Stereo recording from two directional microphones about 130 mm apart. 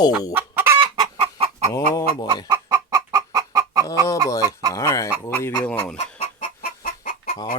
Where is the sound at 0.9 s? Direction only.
40° right (ahead or behind).